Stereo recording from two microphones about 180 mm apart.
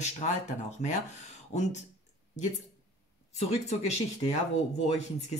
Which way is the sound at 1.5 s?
40° left (ahead or behind).